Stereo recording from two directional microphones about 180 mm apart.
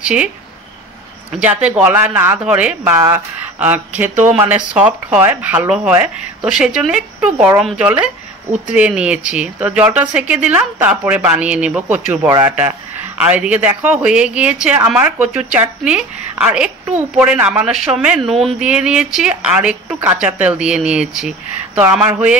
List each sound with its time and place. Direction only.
0.0 s speech: 5° right (ahead or behind)
1.4 s a woman's voice: 10° right (ahead or behind)